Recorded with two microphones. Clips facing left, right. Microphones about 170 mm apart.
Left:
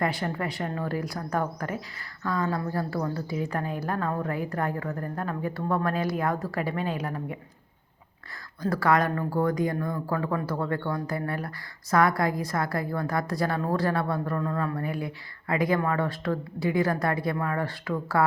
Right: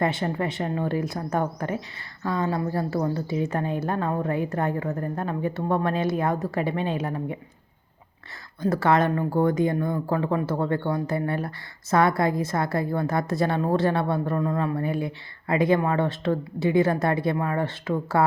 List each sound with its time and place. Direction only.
0.0 s speech: 25° right (ahead or behind)
8.6 s speech: 25° right (ahead or behind)